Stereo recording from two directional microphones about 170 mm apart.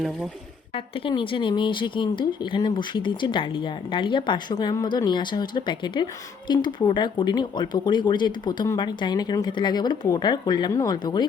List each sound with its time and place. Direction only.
0.7 s speech: 30° left (ahead or behind)